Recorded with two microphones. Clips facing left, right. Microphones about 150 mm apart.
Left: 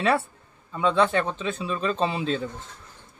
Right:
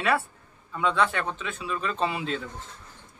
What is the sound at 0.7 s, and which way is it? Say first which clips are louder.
Speech: left 3 dB; 25° left (ahead or behind).